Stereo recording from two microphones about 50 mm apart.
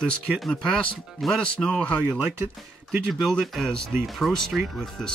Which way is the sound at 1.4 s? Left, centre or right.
Centre.